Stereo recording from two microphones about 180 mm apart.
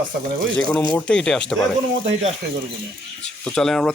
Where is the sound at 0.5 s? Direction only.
10° left (ahead or behind).